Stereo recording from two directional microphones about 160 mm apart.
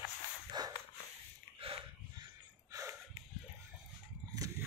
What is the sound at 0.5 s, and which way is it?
Dog, 25° right (ahead or behind).